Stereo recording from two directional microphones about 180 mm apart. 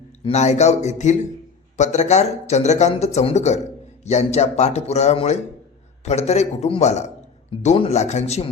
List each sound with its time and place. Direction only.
0.3 s speech: 40° left (ahead or behind)